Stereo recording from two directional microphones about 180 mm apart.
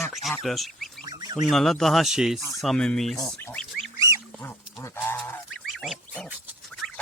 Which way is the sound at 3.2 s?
15° left (ahead or behind).